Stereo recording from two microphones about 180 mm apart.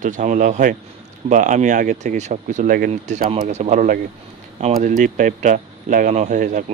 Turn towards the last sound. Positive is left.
turn(degrees=-45)  # may be behind; listen again after turning